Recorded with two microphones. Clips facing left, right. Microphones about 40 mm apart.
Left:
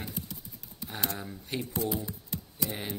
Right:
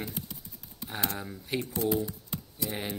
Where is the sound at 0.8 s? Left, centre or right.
Centre.